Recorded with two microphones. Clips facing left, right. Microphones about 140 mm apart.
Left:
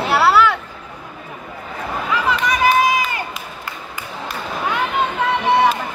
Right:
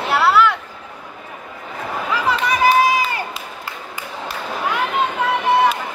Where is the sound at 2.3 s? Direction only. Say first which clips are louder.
Right 1 dB; 35° right (ahead or behind).